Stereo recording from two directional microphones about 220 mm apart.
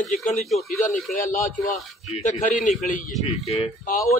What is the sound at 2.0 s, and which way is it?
A man's voice, 30° left (ahead or behind).